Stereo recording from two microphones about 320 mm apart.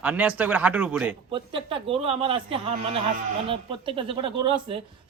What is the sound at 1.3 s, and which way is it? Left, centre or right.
A woman's voice, centre.